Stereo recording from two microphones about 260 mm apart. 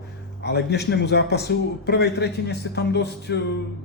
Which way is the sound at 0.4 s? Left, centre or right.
Left.